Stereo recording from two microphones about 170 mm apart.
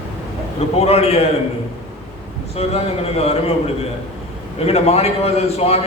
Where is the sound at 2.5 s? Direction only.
35° left (ahead or behind).